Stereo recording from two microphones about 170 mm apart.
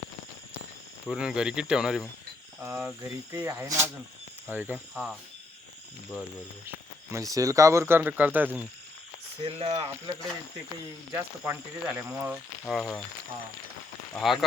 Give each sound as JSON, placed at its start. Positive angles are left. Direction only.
{"t": 1.0, "sound": "speech", "side_deg": -5}
{"t": 7.1, "sound": "speech", "side_deg": -20}
{"t": 9.4, "sound": "speech", "side_deg": -35}
{"t": 11.1, "sound": "speech", "side_deg": -15}
{"t": 12.6, "sound": "speech", "side_deg": 5}
{"t": 14.1, "sound": "speech", "side_deg": 0}